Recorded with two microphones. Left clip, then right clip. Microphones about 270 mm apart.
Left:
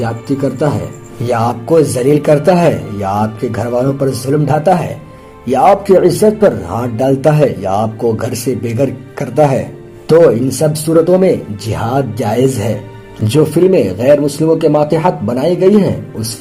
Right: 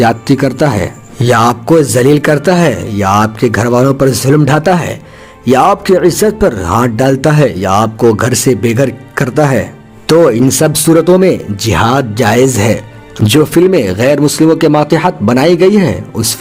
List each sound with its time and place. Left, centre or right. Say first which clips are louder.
1.2 s speech: right 6 dB; right